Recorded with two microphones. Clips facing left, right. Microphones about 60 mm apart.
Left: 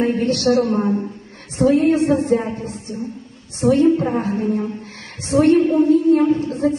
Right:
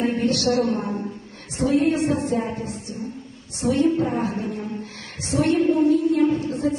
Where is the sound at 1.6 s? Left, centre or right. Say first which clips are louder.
Left 5 dB; left.